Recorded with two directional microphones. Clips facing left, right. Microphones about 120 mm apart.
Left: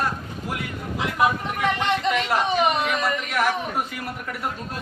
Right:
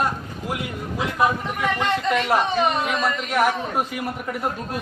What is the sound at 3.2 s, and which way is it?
Speech, 25° right (ahead or behind).